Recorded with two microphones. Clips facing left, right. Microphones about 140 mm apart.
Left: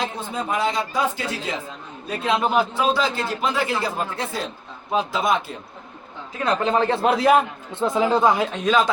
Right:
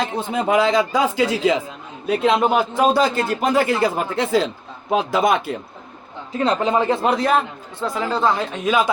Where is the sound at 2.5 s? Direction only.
45° right (ahead or behind); by 4.9 s 90° right.